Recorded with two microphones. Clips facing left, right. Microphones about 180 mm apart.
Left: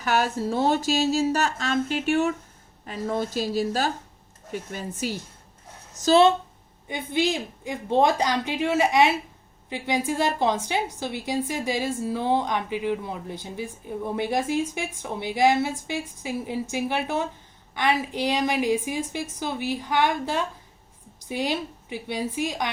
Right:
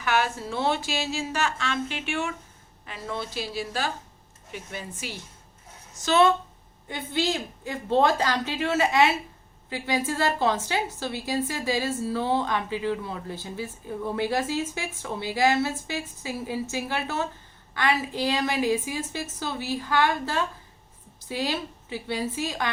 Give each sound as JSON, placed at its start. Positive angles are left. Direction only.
{"t": 0.0, "sound": "speech", "side_deg": 40}
{"t": 6.8, "sound": "a woman's voice", "side_deg": 15}